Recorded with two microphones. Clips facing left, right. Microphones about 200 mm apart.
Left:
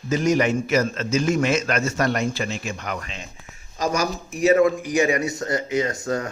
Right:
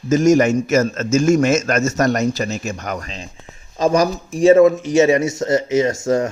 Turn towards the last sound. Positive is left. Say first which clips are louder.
# right 7 dB
turn(degrees=-25)  # may be behind; listen again after turning